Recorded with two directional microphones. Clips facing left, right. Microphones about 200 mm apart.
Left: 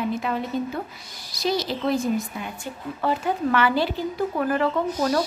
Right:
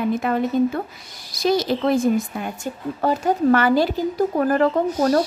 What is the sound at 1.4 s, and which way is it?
A woman's voice, 50° right (ahead or behind).